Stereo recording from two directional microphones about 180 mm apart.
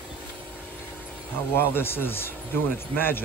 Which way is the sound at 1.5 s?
10° left (ahead or behind).